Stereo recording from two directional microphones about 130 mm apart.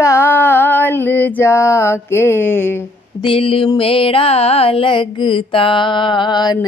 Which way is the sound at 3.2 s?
45° left (ahead or behind).